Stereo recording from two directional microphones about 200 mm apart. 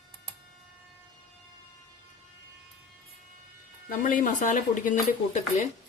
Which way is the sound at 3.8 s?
40° left (ahead or behind).